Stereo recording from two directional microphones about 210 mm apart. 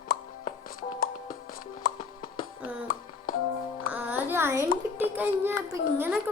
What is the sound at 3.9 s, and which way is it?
Music, 10° right (ahead or behind).